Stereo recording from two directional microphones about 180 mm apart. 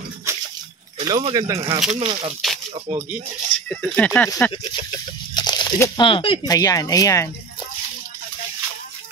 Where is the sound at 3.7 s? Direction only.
5° left (ahead or behind).